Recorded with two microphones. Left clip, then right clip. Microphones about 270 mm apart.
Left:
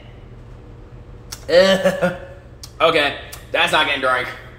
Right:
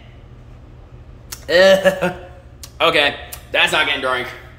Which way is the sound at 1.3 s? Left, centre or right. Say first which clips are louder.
Right 2 dB; centre.